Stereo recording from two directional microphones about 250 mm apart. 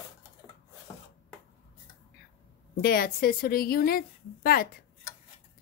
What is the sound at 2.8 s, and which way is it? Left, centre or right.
Speech, left.